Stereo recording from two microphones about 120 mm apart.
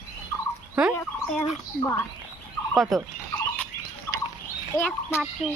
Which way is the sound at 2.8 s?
Centre (ahead or behind).